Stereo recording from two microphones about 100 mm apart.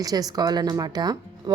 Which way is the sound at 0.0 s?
40° right (ahead or behind).